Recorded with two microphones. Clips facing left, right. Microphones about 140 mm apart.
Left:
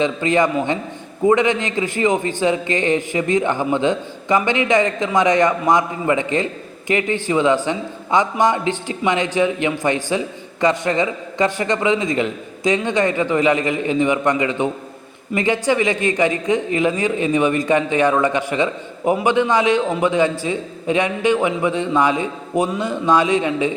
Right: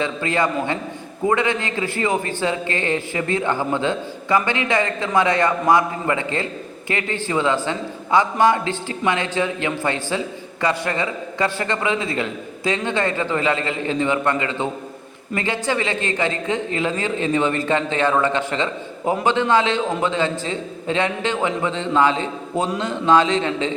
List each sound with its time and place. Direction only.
0.0 s a man's voice: 20° left (ahead or behind)